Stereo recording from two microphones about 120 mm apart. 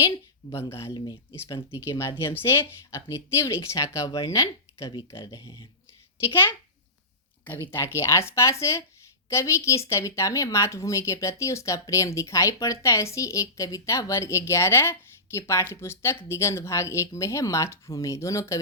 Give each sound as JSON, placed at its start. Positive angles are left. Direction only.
{"t": 0.9, "sound": "speech", "side_deg": 40}
{"t": 6.2, "sound": "speech", "side_deg": 20}